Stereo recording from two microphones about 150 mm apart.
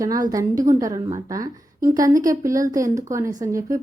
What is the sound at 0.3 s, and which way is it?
A woman's voice, 25° right (ahead or behind).